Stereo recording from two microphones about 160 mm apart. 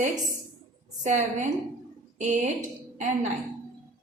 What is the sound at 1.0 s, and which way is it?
A woman's voice, 50° right (ahead or behind).